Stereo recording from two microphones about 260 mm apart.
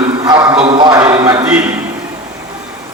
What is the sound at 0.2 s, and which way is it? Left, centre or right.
A man's voice, centre.